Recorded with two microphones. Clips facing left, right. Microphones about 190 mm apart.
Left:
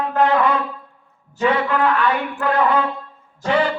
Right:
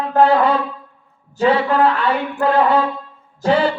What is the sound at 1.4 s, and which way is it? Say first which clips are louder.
Speech: right 4 dB; 30° right (ahead or behind).